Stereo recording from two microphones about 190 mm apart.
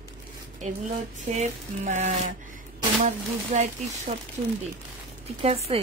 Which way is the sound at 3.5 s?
40° right (ahead or behind).